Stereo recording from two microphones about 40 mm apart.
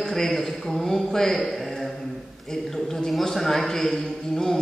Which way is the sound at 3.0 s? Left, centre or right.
Centre.